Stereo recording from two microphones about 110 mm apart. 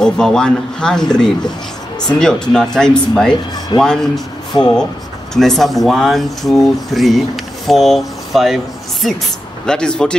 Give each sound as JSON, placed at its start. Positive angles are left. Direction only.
{"t": 0.0, "sound": "speech", "side_deg": 5}
{"t": 3.7, "sound": "speech", "side_deg": 45}
{"t": 5.3, "sound": "speech", "side_deg": 0}